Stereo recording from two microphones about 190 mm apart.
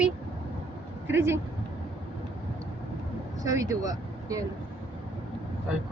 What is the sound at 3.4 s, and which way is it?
Speech, 15° right (ahead or behind).